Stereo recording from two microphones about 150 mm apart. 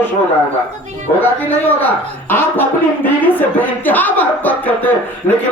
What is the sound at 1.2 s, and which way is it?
Speech, 10° left (ahead or behind).